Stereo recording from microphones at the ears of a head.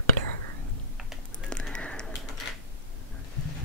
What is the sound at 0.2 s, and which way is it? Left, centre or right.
Whispering, right.